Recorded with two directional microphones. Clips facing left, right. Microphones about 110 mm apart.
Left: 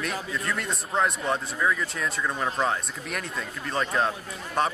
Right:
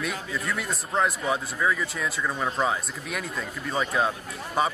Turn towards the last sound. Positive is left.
turn(degrees=-5)  # may be behind; listen again after turning